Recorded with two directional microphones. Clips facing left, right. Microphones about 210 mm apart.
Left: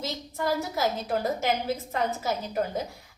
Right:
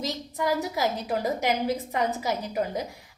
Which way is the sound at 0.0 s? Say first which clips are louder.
Right 2 dB; 15° right (ahead or behind).